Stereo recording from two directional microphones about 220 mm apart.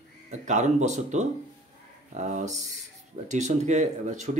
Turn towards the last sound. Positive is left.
turn(degrees=-35)  # may be behind; listen again after turning